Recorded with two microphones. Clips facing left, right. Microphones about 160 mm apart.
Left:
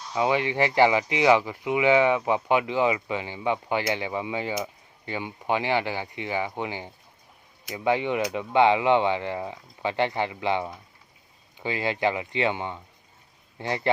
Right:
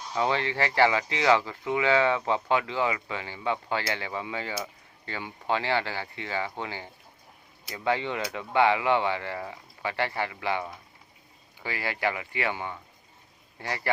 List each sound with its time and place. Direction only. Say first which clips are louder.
0.1 s speech: left 3 dB; 15° left (ahead or behind)